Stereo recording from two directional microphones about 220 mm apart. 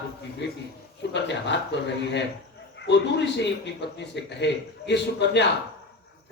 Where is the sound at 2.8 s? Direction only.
50° left (ahead or behind).